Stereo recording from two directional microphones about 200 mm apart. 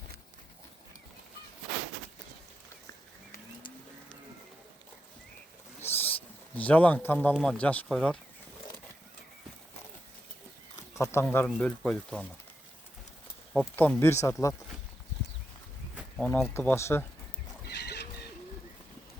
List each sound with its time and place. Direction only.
5.8 s wild animals: 10° left (ahead or behind)
6.6 s speech: 5° left (ahead or behind)
10.9 s speech: 15° left (ahead or behind)
13.7 s speech: 10° left (ahead or behind)
16.0 s speech: 5° left (ahead or behind)
17.7 s owl: 55° left (ahead or behind)